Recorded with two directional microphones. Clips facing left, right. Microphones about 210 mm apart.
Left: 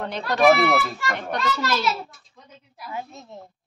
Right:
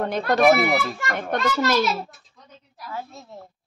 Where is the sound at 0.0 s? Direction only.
50° right (ahead or behind).